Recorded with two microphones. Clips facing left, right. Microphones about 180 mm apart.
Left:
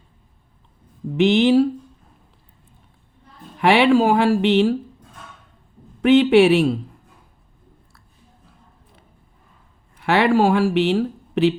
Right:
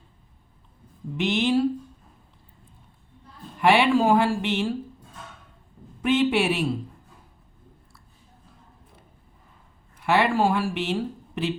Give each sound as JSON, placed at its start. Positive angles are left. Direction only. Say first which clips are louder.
{"t": 1.1, "sound": "speech", "louder": "left 8 dB", "side_deg": 70}
{"t": 3.6, "sound": "speech", "louder": "left 4 dB", "side_deg": 70}
{"t": 6.0, "sound": "speech", "louder": "left 9 dB", "side_deg": 70}
{"t": 10.0, "sound": "speech", "louder": "left 5 dB", "side_deg": 70}